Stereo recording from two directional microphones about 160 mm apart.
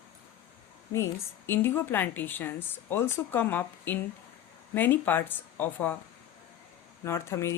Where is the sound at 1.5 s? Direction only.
15° left (ahead or behind).